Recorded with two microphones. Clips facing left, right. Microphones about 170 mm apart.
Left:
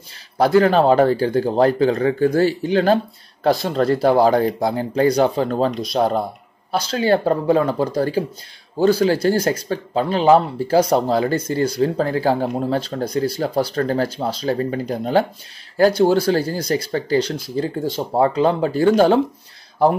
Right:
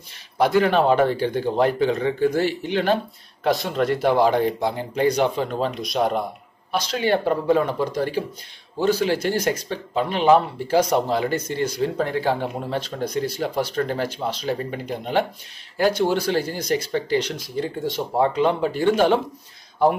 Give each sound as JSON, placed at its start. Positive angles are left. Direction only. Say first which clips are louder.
{"t": 0.7, "sound": "speech", "louder": "left 4 dB", "side_deg": 35}